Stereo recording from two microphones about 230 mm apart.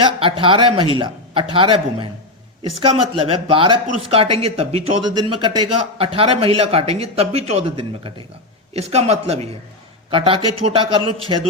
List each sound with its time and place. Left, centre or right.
0.0 s a man's voice: right